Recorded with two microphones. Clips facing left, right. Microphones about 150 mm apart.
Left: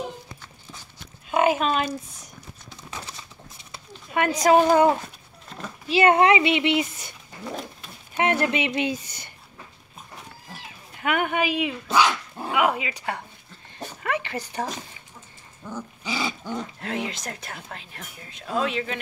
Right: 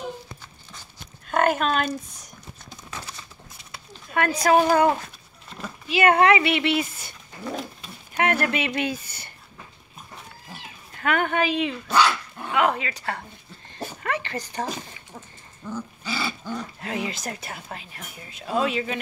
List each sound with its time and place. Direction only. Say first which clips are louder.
1.3 s speech: left 1 dB; 5° left (ahead or behind)
3.7 s speech: even; 20° left (ahead or behind)
11.0 s speech: right 1 dB; 10° left (ahead or behind)
14.0 s a sound: left 1 dB; 10° left (ahead or behind)
15.6 s dog: right 1 dB; 15° left (ahead or behind)
16.8 s speech: even; 5° right (ahead or behind)